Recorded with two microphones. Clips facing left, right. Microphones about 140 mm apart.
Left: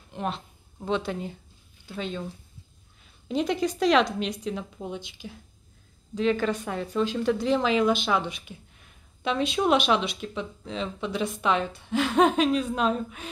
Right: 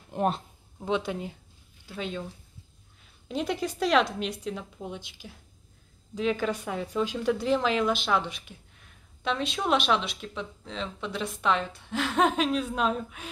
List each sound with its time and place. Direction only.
0.1 s a sound: 45° right (ahead or behind)
0.7 s speech: 10° right (ahead or behind)
3.3 s speech: 5° right (ahead or behind)